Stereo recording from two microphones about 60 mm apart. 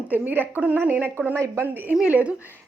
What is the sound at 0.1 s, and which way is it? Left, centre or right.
A woman's voice, right.